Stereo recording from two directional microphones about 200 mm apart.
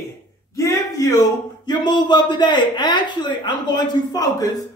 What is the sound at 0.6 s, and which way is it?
Speech, 15° left (ahead or behind).